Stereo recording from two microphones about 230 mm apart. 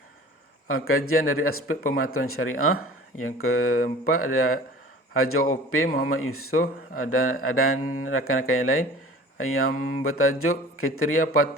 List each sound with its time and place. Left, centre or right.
0.7 s speech: left
1.7 s speech: left
2.1 s speech: left
6.6 s speech: left
7.1 s speech: left